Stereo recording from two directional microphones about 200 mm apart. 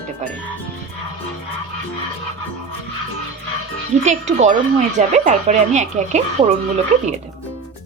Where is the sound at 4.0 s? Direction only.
35° right (ahead or behind).